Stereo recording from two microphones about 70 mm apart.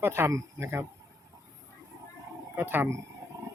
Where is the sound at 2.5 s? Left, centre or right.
Right.